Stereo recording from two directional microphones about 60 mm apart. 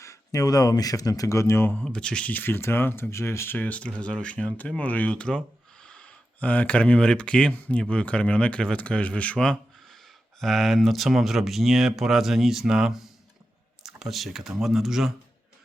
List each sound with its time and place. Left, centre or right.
0.0 s speech: left
1.7 s speech: centre
2.3 s speech: left
3.6 s speech: left
10.4 s speech: centre